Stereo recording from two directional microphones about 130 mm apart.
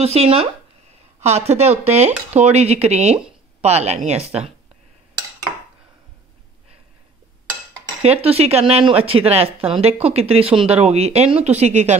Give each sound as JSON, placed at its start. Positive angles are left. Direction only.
{"t": 0.0, "sound": "speech", "side_deg": -50}
{"t": 8.0, "sound": "speech", "side_deg": -50}